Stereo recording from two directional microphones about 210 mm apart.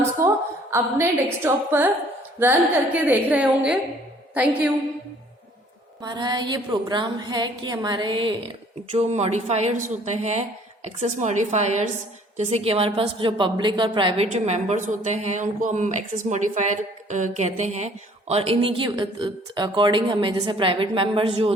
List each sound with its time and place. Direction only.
0.2 s a sound: 15° right (ahead or behind)
0.7 s a woman's voice: 10° right (ahead or behind)
6.0 s a woman's voice: 20° right (ahead or behind)